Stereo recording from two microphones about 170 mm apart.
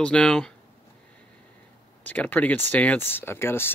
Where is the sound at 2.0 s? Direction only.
10° left (ahead or behind).